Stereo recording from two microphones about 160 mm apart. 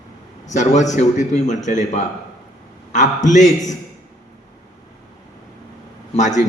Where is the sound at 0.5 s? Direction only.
50° left (ahead or behind).